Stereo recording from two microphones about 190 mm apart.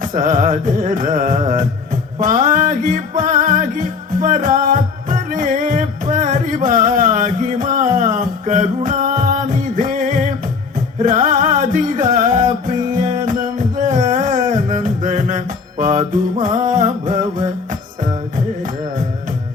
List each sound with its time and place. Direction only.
0.0 s music: 45° right (ahead or behind)